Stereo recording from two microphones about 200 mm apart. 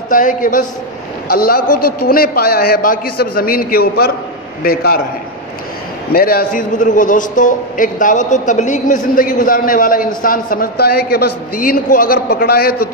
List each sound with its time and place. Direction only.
0.1 s a man's voice: 40° left (ahead or behind)
6.1 s a man's voice: 50° left (ahead or behind)